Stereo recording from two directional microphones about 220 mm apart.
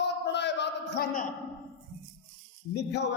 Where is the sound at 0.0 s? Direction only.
50° left (ahead or behind).